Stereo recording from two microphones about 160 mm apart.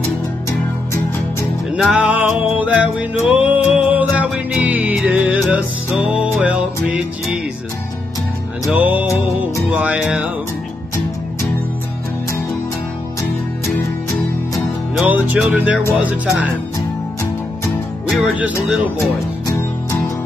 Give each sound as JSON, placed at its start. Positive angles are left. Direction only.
{"t": 1.7, "sound": "music", "side_deg": -5}
{"t": 8.6, "sound": "music", "side_deg": -10}
{"t": 9.7, "sound": "speech", "side_deg": -5}
{"t": 15.0, "sound": "speech", "side_deg": -10}
{"t": 18.1, "sound": "music", "side_deg": -5}
{"t": 18.9, "sound": "music", "side_deg": 20}